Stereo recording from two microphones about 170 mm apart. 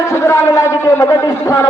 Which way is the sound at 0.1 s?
15° left (ahead or behind).